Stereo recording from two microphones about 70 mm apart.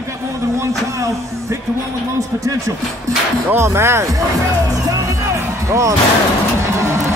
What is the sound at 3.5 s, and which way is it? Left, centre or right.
Speech, right.